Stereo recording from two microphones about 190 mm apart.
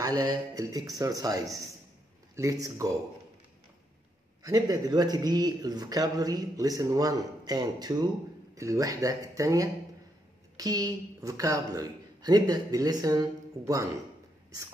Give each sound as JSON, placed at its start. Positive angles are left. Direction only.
{"t": 0.0, "sound": "speech", "side_deg": -20}
{"t": 4.4, "sound": "a man's voice", "side_deg": -20}